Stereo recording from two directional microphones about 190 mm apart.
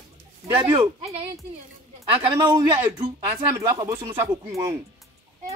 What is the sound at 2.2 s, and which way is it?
Speech, 25° right (ahead or behind).